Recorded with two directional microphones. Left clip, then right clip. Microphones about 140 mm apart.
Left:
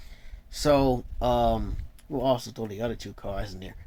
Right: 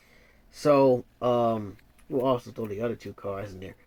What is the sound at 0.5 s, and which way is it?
Speech, 30° left (ahead or behind).